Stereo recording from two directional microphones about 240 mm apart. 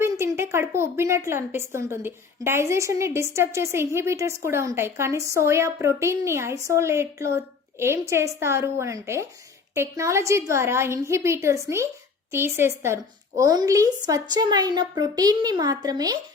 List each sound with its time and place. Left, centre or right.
0.0 s a woman's voice: centre